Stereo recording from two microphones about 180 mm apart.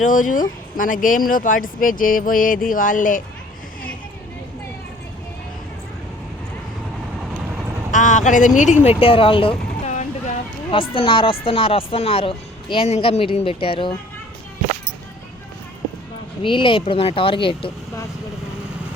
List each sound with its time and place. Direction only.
0.0 s speech: 45° left (ahead or behind)
7.9 s speech: 45° left (ahead or behind); by 9.9 s 30° left (ahead or behind)
9.9 s boat: 40° left (ahead or behind)
10.7 s speech: 30° left (ahead or behind)
16.4 s speech: 30° left (ahead or behind)